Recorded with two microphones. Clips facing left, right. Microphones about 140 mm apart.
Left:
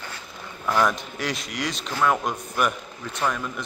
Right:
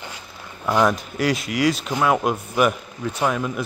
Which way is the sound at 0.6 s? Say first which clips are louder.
Right 3 dB; 20° right (ahead or behind).